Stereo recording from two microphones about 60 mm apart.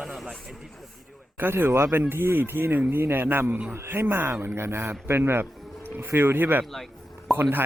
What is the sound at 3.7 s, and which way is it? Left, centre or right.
Speech, right.